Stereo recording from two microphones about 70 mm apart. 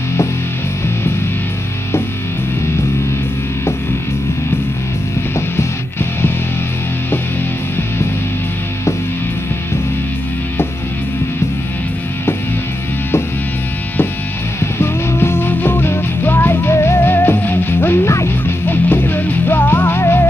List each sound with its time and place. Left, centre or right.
14.6 s music: left
18.7 s music: left